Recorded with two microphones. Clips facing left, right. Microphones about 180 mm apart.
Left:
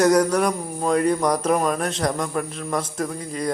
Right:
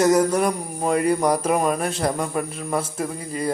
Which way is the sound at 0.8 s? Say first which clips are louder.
Even; 5° right (ahead or behind).